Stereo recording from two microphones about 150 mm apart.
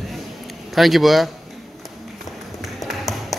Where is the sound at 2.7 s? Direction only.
Centre (ahead or behind).